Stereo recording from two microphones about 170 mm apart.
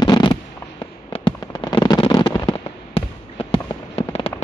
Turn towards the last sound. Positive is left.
turn(degrees=35)  # may be behind; listen again after turning